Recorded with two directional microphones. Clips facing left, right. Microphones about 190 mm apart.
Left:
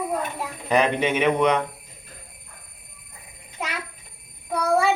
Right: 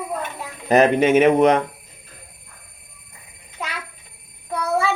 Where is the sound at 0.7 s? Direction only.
45° right (ahead or behind).